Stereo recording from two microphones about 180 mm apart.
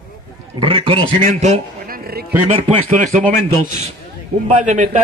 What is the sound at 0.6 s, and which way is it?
Speech, 30° right (ahead or behind).